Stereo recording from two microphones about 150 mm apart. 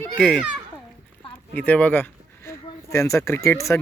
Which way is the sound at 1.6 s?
10° left (ahead or behind).